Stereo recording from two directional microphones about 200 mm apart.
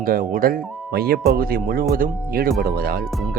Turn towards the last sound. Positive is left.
turn(degrees=-50)  # may be behind; listen again after turning